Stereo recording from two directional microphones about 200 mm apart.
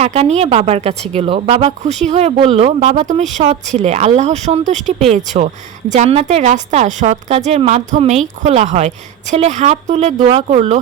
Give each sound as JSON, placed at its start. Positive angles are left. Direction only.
{"t": 0.0, "sound": "a woman's voice", "side_deg": -30}